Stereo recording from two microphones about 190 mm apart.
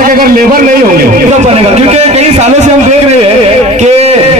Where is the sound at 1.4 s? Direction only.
35° right (ahead or behind).